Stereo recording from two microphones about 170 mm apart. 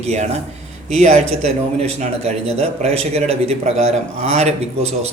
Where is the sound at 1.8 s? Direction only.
40° right (ahead or behind).